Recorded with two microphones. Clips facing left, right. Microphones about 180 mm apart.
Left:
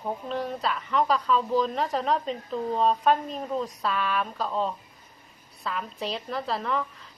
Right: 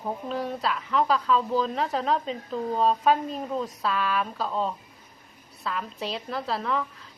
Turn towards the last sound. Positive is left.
turn(degrees=0)  # may be behind; listen again after turning